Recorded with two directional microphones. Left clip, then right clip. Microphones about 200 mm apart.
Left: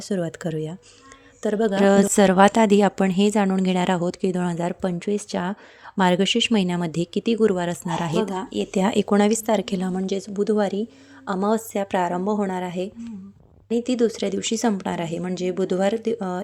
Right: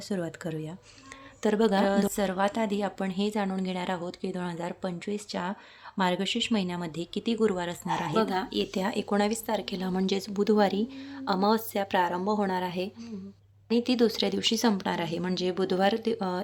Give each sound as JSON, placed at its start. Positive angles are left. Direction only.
{"t": 0.1, "sound": "speech", "side_deg": 25}
{"t": 1.4, "sound": "a sound", "side_deg": 10}
{"t": 1.8, "sound": "a woman's voice", "side_deg": 40}
{"t": 8.3, "sound": "speech", "side_deg": 15}
{"t": 8.7, "sound": "a woman's voice", "side_deg": 35}
{"t": 9.9, "sound": "speech", "side_deg": 10}